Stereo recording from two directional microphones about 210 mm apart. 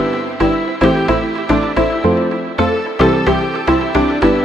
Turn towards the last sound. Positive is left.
turn(degrees=0)  # may be behind; listen again after turning